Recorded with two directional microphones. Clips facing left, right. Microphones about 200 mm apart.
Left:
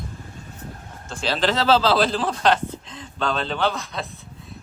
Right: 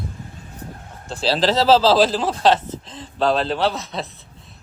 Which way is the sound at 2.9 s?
35° right (ahead or behind).